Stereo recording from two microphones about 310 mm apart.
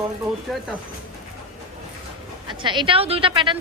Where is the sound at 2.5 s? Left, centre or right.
Centre.